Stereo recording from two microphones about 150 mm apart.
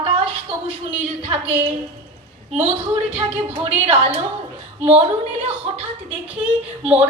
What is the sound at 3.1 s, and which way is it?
A woman's voice, 35° right (ahead or behind).